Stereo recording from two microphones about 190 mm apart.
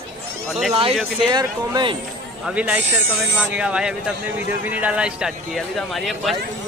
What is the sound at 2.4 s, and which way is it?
A man's voice, 5° right (ahead or behind).